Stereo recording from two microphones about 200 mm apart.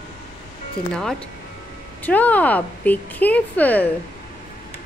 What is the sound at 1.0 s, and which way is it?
Speech, 5° left (ahead or behind).